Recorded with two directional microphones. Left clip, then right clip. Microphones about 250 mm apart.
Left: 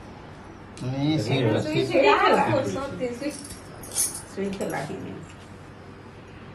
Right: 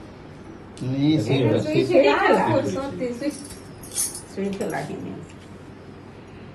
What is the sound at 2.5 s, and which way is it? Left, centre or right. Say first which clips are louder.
Speech: right 2 dB; left.